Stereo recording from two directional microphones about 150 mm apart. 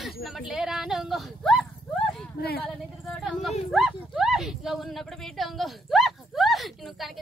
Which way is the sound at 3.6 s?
Centre (ahead or behind).